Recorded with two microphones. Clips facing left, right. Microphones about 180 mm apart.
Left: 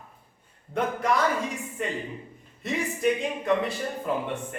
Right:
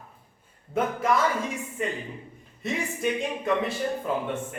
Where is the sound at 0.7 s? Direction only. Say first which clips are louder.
Right 1 dB; centre (ahead or behind).